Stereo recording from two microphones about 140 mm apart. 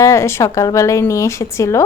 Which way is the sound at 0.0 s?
20° left (ahead or behind).